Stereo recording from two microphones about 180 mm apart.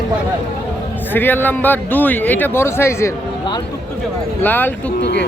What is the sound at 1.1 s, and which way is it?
Speech, 10° left (ahead or behind).